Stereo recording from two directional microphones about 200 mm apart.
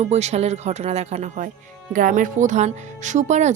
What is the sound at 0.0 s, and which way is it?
Speech, 35° right (ahead or behind).